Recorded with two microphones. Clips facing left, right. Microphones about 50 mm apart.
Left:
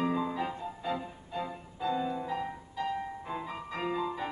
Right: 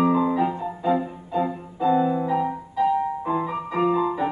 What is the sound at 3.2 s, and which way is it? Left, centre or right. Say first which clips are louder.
Music: right 12 dB; right.